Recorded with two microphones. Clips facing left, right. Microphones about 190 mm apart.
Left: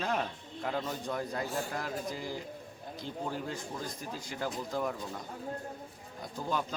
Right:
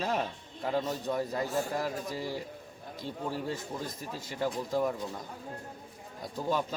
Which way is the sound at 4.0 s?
5° right (ahead or behind).